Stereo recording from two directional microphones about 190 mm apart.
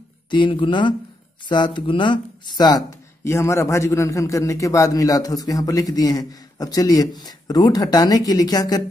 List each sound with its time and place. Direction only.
0.3 s a man's voice: 25° left (ahead or behind)